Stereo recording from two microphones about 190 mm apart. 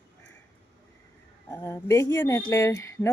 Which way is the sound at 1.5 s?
10° left (ahead or behind).